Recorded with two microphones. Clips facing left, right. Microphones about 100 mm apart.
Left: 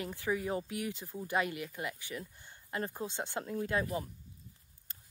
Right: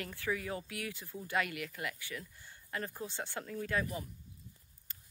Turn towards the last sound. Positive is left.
turn(degrees=25)  # may be behind; listen again after turning